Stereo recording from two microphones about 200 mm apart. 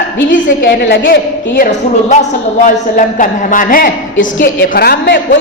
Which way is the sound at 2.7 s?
40° left (ahead or behind).